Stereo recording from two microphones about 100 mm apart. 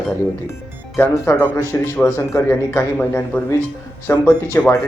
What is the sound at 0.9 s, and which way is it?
A man's voice, 25° left (ahead or behind).